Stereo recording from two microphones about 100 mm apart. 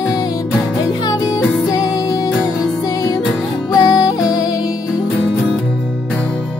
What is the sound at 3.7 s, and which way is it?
Music, 40° left (ahead or behind).